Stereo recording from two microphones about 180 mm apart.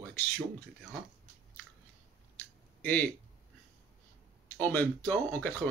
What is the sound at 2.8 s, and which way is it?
Speech, 10° left (ahead or behind).